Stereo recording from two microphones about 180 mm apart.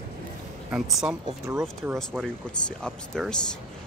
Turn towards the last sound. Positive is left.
turn(degrees=5)  # may be behind; listen again after turning